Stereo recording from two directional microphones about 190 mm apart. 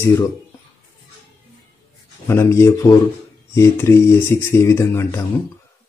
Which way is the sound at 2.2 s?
15° left (ahead or behind).